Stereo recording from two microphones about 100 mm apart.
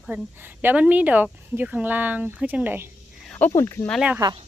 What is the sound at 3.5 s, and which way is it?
Speech, 30° left (ahead or behind).